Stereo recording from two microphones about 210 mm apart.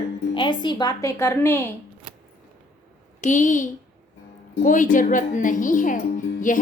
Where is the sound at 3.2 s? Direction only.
35° left (ahead or behind).